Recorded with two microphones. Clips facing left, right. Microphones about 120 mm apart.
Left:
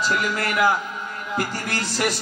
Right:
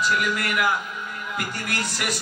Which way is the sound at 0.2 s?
30° left (ahead or behind).